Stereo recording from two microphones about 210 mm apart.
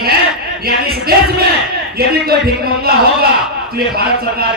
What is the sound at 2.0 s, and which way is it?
A man's voice, 45° right (ahead or behind).